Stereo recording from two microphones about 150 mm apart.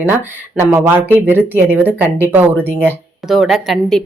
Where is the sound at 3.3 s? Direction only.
Centre (ahead or behind).